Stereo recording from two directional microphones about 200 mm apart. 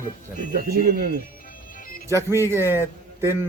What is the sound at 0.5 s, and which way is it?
Speech, 50° right (ahead or behind).